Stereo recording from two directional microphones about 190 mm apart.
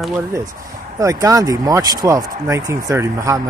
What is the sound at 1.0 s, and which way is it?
Speech, 15° right (ahead or behind).